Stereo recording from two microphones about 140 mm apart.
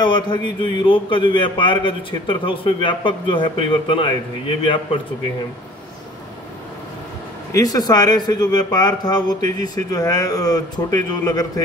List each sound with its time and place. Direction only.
0.0 s a man's voice: 30° left (ahead or behind)
7.5 s speech: 25° left (ahead or behind)